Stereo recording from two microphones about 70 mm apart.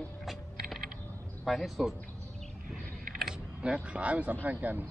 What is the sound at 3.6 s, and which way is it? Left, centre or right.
Speech, centre.